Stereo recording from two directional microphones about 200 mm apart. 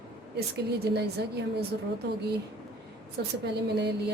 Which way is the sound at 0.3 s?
55° right (ahead or behind).